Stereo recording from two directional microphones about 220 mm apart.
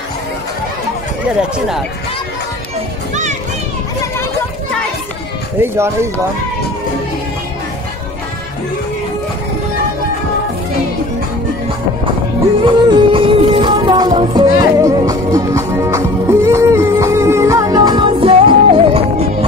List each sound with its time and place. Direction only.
5.6 s speech: 10° right (ahead or behind)
12.6 s music: 25° right (ahead or behind)